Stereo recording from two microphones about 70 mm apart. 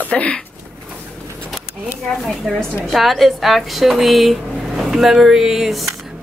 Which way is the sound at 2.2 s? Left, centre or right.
Centre.